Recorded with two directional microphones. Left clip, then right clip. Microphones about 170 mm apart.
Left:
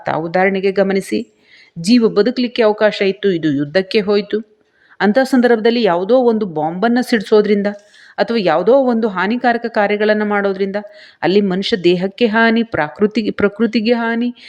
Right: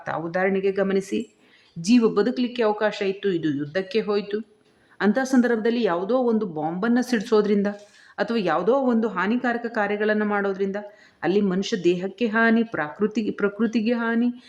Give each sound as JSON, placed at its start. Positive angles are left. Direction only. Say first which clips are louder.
{"t": 0.0, "sound": "speech", "louder": "left 9 dB", "side_deg": 25}